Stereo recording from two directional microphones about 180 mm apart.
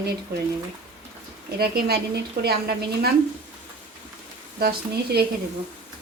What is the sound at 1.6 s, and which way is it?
Speech, 60° right (ahead or behind).